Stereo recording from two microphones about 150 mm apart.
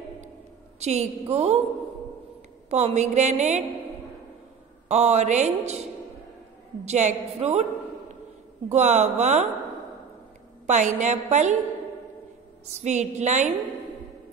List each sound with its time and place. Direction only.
0.7 s a woman's voice: 45° right (ahead or behind)
2.7 s a woman's voice: 50° right (ahead or behind)
4.8 s a woman's voice: 50° right (ahead or behind)
8.6 s a woman's voice: 50° right (ahead or behind)
10.7 s a woman's voice: 55° right (ahead or behind)
12.6 s a woman's voice: 50° right (ahead or behind)